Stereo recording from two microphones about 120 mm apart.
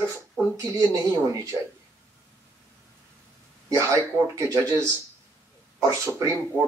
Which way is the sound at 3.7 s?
25° right (ahead or behind).